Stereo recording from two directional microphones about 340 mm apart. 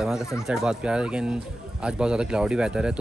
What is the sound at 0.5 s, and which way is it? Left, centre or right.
Speech, centre.